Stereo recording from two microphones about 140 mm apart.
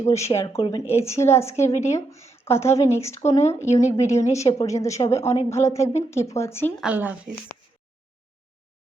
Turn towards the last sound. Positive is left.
turn(degrees=-10)  # may be behind; listen again after turning